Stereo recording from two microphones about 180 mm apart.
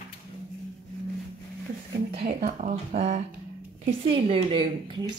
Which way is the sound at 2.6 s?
40° right (ahead or behind).